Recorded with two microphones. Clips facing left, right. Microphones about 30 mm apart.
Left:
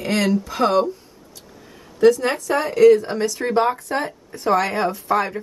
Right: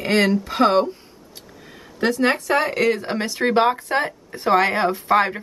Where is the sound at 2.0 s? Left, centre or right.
Right.